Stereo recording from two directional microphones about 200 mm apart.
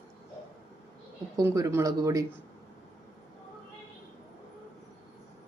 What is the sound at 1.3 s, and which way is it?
Speech, 15° right (ahead or behind).